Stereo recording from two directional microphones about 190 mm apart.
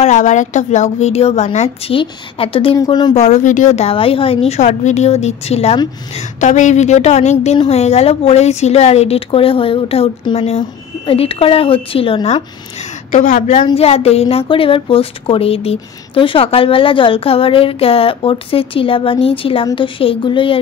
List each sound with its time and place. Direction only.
0.0 s a woman's voice: 40° left (ahead or behind); by 3.2 s 20° left (ahead or behind)
3.2 s a woman's voice: 40° left (ahead or behind)
13.1 s a woman's voice: 45° left (ahead or behind)
13.7 s a woman's voice: 30° left (ahead or behind)